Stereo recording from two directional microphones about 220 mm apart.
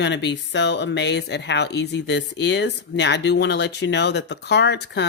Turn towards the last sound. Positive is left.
turn(degrees=50)  # may be behind; listen again after turning